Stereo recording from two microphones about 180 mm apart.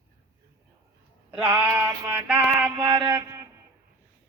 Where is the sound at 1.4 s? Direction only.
10° right (ahead or behind).